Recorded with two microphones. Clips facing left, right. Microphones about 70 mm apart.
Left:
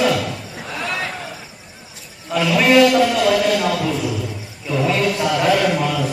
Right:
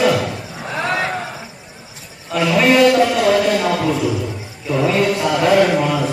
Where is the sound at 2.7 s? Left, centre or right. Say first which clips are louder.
Left 1 dB; right.